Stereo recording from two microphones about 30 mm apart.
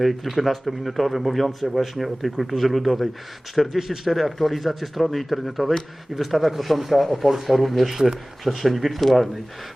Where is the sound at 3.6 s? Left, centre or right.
Centre.